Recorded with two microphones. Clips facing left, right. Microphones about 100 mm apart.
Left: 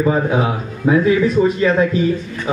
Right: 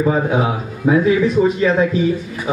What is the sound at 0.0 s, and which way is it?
A man's voice, 5° right (ahead or behind).